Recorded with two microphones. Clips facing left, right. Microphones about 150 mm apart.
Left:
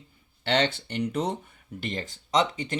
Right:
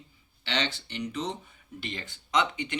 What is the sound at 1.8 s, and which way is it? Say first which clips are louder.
Speech: left 6 dB; 45° left (ahead or behind).